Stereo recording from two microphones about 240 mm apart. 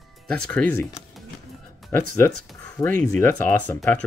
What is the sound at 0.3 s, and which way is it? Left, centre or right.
Speech, centre.